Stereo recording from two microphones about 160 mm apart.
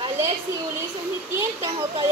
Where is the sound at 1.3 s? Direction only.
15° right (ahead or behind).